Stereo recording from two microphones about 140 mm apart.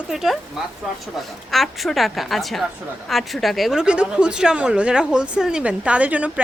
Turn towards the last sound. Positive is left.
turn(degrees=-10)  # may be behind; listen again after turning